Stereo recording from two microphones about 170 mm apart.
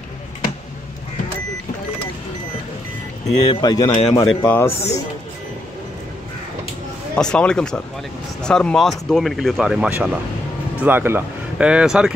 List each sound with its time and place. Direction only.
3.4 s speech: 20° left (ahead or behind)
3.9 s a man's voice: 35° left (ahead or behind)
4.5 s speech: 15° left (ahead or behind)
7.2 s speech: 5° left (ahead or behind)